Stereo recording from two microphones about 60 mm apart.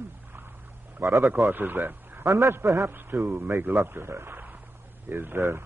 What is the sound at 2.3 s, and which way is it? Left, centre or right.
Speech, right.